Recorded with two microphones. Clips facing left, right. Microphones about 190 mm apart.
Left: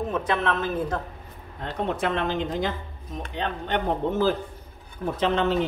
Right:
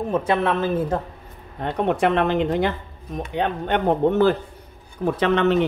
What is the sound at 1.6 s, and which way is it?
Speech, 60° right (ahead or behind).